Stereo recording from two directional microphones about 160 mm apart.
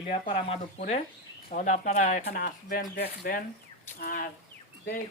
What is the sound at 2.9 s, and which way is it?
Speech, 90° left.